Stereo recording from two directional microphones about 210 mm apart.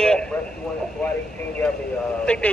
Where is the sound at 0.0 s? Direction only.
5° left (ahead or behind).